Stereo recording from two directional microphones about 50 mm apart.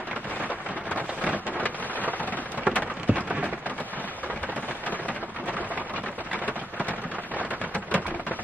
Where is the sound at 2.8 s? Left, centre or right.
Right.